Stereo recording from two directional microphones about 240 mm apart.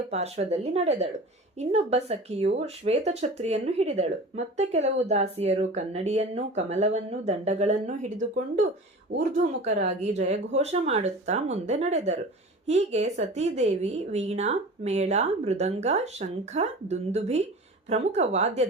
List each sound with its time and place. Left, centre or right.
0.1 s a woman's voice: right
9.1 s speech: right
9.6 s a woman's voice: right